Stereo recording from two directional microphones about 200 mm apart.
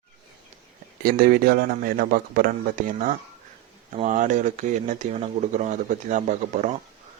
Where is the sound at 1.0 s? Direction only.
45° right (ahead or behind).